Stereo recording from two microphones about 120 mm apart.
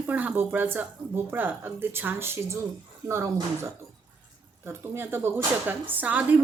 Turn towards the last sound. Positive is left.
turn(degrees=-15)  # may be behind; listen again after turning